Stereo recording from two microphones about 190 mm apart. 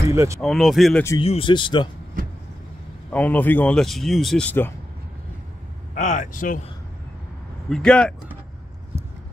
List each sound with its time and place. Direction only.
0.1 s speech: 15° right (ahead or behind)
0.4 s speech: centre (ahead or behind)
1.2 s speech: 30° left (ahead or behind)
3.1 s speech: 10° left (ahead or behind)
5.9 s speech: 40° left (ahead or behind)
7.7 s speech: 5° left (ahead or behind)